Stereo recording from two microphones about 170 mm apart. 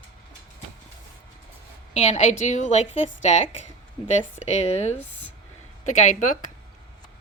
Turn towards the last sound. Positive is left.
turn(degrees=45)  # may be behind; listen again after turning